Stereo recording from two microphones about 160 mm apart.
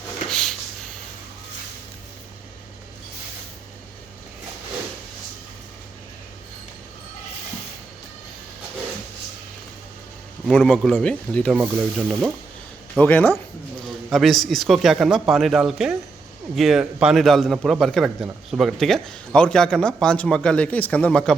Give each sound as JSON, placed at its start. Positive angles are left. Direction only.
{"t": 0.3, "sound": "a sound", "side_deg": 5}
{"t": 10.4, "sound": "a man's voice", "side_deg": 5}
{"t": 13.8, "sound": "a man's voice", "side_deg": 0}